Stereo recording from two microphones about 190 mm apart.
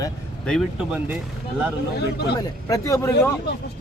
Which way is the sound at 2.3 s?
20° left (ahead or behind).